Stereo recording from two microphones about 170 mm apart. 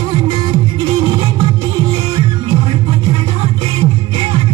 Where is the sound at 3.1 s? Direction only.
25° right (ahead or behind).